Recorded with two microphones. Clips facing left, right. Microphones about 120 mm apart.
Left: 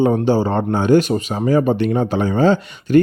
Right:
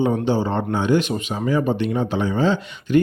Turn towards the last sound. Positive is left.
turn(degrees=45)  # may be behind; listen again after turning